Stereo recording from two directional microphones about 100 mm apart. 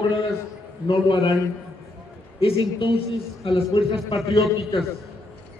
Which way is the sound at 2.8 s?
65° left (ahead or behind).